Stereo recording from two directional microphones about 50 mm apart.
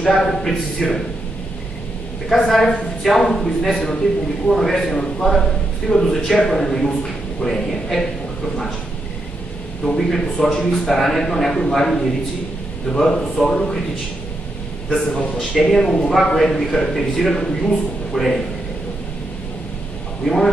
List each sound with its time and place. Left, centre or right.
0.0 s a man's voice: centre
2.5 s a man's voice: centre
9.9 s a man's voice: centre
15.0 s a man's voice: left
15.7 s a man's voice: centre